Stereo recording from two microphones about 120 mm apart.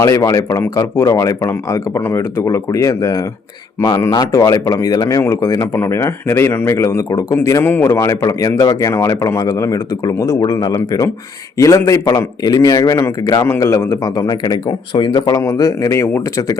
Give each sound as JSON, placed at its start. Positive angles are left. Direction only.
{"t": 0.0, "sound": "speech", "side_deg": 30}
{"t": 15.4, "sound": "speech", "side_deg": 30}